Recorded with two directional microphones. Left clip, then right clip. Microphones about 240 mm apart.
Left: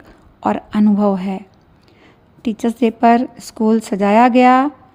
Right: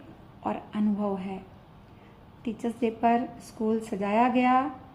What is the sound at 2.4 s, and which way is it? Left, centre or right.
A woman's voice, left.